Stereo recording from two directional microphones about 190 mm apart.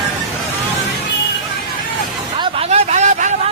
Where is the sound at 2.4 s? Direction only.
35° right (ahead or behind).